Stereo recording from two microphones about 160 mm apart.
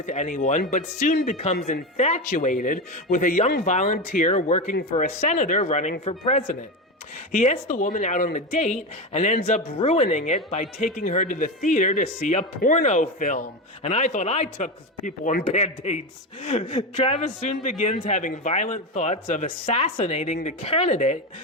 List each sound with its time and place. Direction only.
0.0 s speech: 50° left (ahead or behind)
17.2 s speech: 50° left (ahead or behind)